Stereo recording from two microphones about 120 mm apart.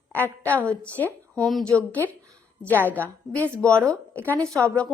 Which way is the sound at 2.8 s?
15° left (ahead or behind).